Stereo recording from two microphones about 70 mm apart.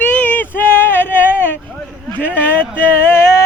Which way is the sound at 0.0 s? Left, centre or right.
Left.